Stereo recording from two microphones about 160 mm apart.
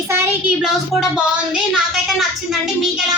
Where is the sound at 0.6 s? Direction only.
Centre (ahead or behind).